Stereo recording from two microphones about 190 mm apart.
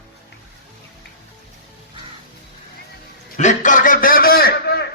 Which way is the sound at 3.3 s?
40° left (ahead or behind).